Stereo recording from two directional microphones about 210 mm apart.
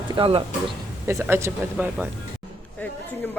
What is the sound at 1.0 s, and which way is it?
Speech, 10° right (ahead or behind).